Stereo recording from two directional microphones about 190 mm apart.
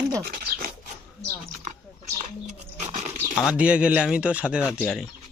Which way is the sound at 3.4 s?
5° right (ahead or behind).